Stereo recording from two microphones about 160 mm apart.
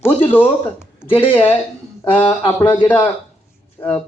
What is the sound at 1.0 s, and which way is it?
Speech, 35° left (ahead or behind).